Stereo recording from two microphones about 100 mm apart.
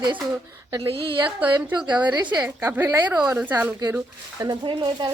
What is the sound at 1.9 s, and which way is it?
Speech, 45° right (ahead or behind).